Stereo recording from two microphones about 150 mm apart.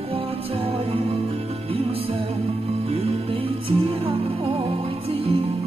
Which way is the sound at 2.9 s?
40° right (ahead or behind).